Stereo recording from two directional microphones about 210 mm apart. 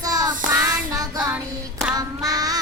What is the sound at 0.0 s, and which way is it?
Child singing, 15° right (ahead or behind).